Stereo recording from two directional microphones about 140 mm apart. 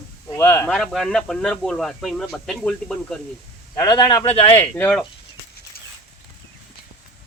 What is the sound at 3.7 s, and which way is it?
Speech, 30° left (ahead or behind).